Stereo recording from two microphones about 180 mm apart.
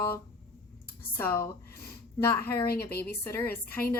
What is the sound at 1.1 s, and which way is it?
Speech, 15° left (ahead or behind).